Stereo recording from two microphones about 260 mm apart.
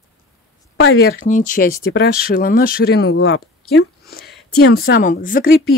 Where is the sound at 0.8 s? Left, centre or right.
Left.